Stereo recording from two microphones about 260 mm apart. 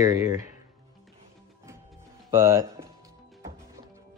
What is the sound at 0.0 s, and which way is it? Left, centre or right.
Speech, centre.